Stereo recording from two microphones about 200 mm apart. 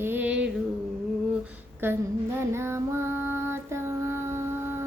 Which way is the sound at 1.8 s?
10° right (ahead or behind).